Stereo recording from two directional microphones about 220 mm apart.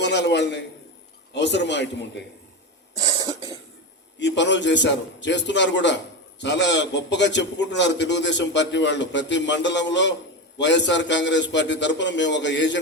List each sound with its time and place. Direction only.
0.0 s a sound: 50° left (ahead or behind)
1.3 s a man's voice: 50° left (ahead or behind)
2.9 s cough: 15° right (ahead or behind)
4.2 s a man's voice: 55° left (ahead or behind)